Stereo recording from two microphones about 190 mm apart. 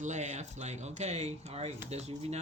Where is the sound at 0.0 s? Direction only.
40° right (ahead or behind).